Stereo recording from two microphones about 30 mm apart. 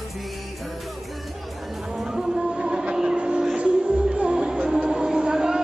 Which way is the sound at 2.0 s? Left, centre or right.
Right.